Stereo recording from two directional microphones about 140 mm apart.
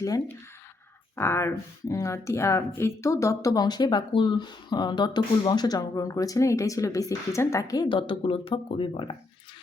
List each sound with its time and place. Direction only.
1.1 s speech: 15° left (ahead or behind); by 9.1 s 40° left (ahead or behind)